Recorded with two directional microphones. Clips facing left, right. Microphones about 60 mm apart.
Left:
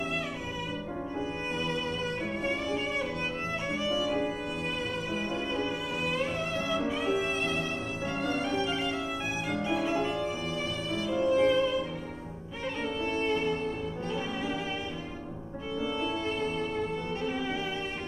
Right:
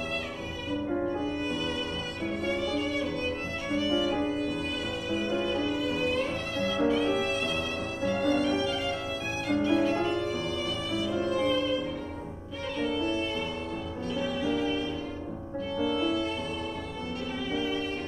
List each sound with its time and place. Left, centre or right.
3.7 s violin: centre
5.5 s music: left
8.0 s music: left
9.6 s violin: centre
11.3 s music: left
12.8 s violin: left
14.1 s music: left
15.8 s music: left